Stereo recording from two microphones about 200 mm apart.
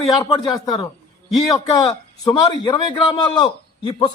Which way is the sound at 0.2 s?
20° left (ahead or behind).